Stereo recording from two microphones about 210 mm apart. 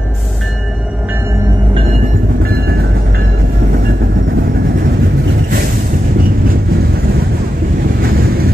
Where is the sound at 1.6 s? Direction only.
25° right (ahead or behind).